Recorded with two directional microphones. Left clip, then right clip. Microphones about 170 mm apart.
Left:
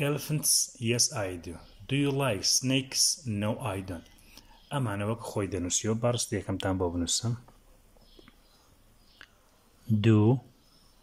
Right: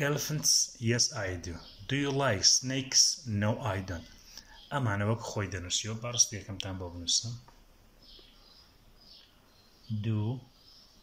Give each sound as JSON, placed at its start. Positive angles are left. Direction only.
{"t": 0.0, "sound": "speech", "side_deg": 10}
{"t": 5.5, "sound": "speech", "side_deg": 35}
{"t": 10.0, "sound": "speech", "side_deg": 75}